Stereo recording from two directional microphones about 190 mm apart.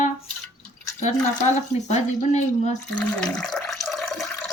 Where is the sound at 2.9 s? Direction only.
5° left (ahead or behind).